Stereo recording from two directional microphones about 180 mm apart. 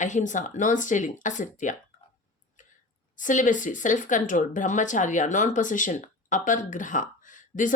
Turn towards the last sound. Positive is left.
turn(degrees=45)  # may be behind; listen again after turning